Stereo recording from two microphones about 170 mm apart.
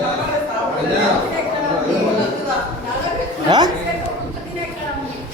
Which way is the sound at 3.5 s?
25° right (ahead or behind).